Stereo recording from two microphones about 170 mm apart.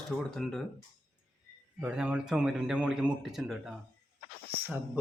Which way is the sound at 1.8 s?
5° right (ahead or behind).